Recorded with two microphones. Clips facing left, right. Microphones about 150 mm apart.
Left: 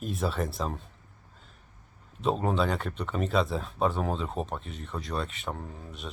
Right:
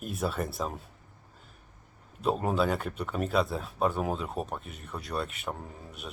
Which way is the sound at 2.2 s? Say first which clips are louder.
Even; 5° right (ahead or behind).